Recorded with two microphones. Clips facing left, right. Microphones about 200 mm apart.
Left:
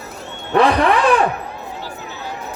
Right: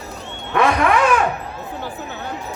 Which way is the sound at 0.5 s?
35° left (ahead or behind).